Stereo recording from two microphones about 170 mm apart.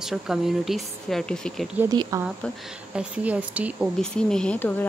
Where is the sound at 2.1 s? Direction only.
20° right (ahead or behind).